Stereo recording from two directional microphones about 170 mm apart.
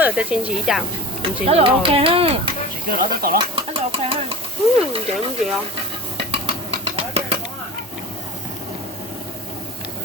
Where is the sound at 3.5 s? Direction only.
30° right (ahead or behind).